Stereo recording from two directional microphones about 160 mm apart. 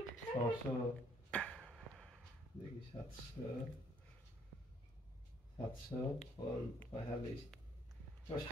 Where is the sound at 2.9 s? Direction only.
30° left (ahead or behind).